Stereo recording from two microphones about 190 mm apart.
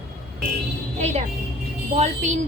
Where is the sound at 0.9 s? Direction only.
35° right (ahead or behind).